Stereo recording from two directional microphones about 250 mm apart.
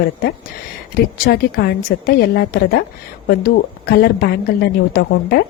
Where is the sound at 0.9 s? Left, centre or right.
Left.